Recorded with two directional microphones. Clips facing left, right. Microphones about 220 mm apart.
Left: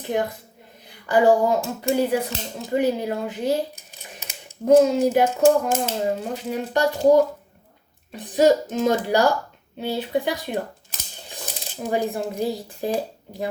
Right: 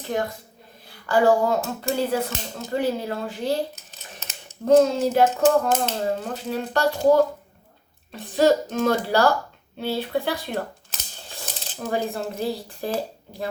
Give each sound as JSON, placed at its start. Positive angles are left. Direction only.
{"t": 0.9, "sound": "speech", "side_deg": 15}
{"t": 8.1, "sound": "speech", "side_deg": 15}